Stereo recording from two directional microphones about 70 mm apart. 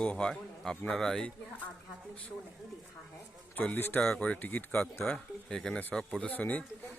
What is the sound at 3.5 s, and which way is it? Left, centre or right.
Speech, left.